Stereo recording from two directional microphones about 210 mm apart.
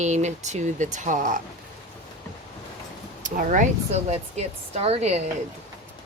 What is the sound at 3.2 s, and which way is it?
Speech, 40° right (ahead or behind).